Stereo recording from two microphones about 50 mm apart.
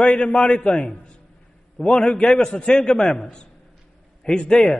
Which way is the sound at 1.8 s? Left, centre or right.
Centre.